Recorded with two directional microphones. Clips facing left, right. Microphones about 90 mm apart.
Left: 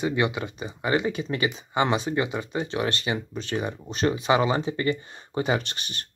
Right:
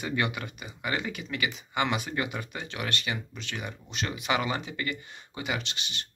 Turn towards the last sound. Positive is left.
turn(degrees=45)  # may be behind; listen again after turning